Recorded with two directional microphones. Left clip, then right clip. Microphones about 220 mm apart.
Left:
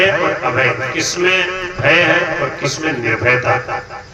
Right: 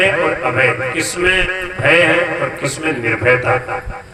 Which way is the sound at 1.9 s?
20° right (ahead or behind).